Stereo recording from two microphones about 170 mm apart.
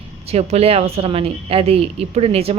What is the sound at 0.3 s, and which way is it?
Speech, 35° right (ahead or behind).